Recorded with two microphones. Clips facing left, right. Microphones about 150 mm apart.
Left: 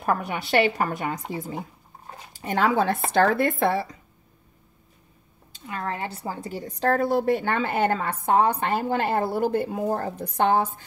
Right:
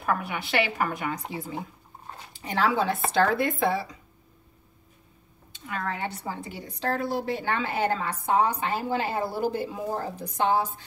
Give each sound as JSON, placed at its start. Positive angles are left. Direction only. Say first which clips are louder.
{"t": 0.0, "sound": "a woman's voice", "louder": "left 3 dB", "side_deg": 40}
{"t": 2.3, "sound": "a woman's voice", "louder": "left 3 dB", "side_deg": 50}
{"t": 5.7, "sound": "a woman's voice", "louder": "left 1 dB", "side_deg": 30}